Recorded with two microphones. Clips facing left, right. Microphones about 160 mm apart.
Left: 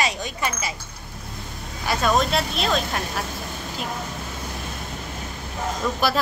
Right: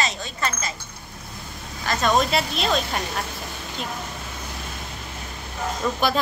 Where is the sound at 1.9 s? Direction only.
5° left (ahead or behind).